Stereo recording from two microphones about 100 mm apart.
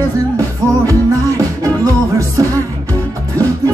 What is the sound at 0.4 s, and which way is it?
Music, 35° right (ahead or behind).